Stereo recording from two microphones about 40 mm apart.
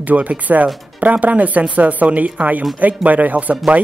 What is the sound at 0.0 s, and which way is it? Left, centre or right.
Speech, right.